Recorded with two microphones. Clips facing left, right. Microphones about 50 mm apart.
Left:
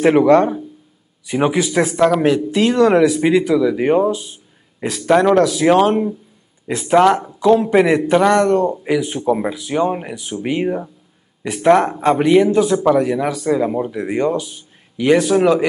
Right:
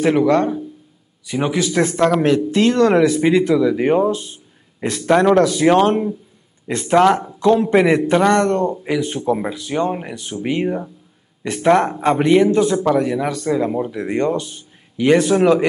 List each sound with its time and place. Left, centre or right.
0.0 s speech: centre